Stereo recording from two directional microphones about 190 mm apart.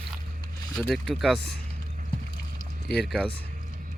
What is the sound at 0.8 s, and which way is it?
Speech, centre (ahead or behind).